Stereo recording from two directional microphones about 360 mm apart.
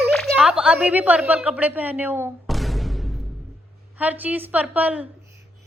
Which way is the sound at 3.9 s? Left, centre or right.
Centre.